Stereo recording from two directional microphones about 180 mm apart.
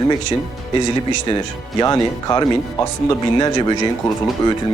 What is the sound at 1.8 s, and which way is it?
Speech, 20° left (ahead or behind).